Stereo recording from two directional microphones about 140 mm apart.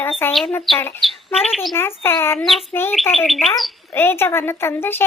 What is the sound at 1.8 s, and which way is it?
Speech, 15° left (ahead or behind).